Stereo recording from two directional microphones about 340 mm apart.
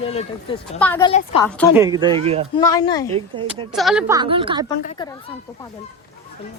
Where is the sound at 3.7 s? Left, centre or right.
Centre.